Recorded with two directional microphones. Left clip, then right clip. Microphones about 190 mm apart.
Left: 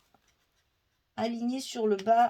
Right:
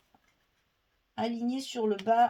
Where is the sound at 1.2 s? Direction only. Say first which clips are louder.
Left 1 dB; 40° left (ahead or behind).